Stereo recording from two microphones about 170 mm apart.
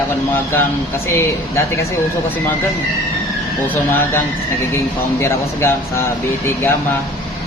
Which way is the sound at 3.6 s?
10° left (ahead or behind).